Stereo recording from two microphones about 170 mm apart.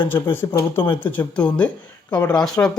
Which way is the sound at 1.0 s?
10° left (ahead or behind).